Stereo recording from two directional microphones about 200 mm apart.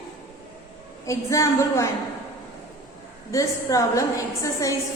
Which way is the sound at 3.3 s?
15° left (ahead or behind).